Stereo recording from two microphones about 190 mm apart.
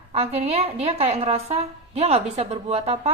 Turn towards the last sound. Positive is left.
turn(degrees=-30)  # may be behind; listen again after turning